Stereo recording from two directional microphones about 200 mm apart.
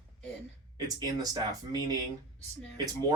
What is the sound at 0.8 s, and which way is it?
Speech, 20° right (ahead or behind).